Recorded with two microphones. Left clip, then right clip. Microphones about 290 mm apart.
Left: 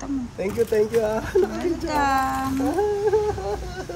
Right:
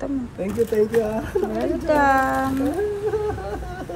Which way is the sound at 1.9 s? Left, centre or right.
Centre.